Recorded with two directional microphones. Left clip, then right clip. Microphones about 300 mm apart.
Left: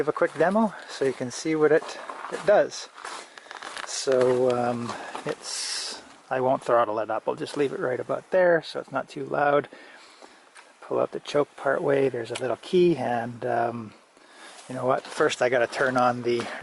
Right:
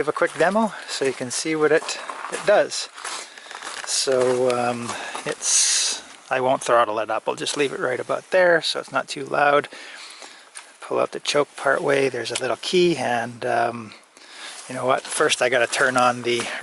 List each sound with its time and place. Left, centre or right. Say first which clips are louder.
0.0 s speech: right 3 dB; centre
0.5 s speech: right 3 dB; left
0.8 s speech: right 3 dB; centre
3.8 s a sound: right 2 dB; centre
4.5 s speech: right 3 dB; centre
10.8 s speech: right 4 dB; centre